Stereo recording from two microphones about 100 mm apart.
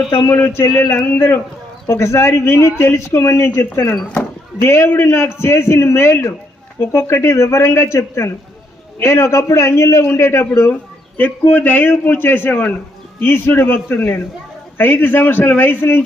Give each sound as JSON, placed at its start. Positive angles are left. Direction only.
{"t": 0.3, "sound": "a man's voice", "side_deg": 20}